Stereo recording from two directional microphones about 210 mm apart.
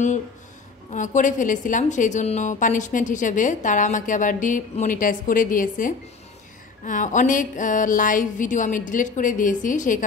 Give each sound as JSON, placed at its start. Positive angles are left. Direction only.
{"t": 0.9, "sound": "a woman's voice", "side_deg": 35}